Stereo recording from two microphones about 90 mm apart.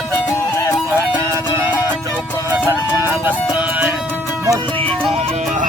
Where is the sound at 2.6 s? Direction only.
25° right (ahead or behind).